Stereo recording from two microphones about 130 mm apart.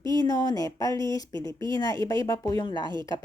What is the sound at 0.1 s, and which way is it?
A woman's voice, 30° left (ahead or behind).